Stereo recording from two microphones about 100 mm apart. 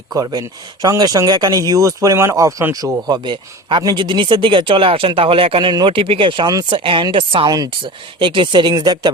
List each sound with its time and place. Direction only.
0.1 s speech: 40° right (ahead or behind); by 7.4 s 60° right (ahead or behind)
7.4 s speech: 40° right (ahead or behind)
8.2 s speech: 55° right (ahead or behind)